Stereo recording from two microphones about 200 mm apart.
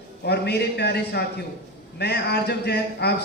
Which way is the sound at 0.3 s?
55° left (ahead or behind).